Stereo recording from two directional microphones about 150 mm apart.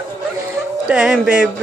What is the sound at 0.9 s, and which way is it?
Speech, 5° right (ahead or behind).